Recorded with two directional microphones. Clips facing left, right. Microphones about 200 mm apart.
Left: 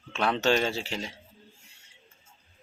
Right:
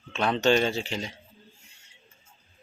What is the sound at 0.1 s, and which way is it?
Speech, 5° left (ahead or behind).